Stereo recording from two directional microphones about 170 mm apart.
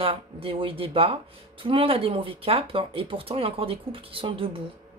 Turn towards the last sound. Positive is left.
turn(degrees=-30)  # may be behind; listen again after turning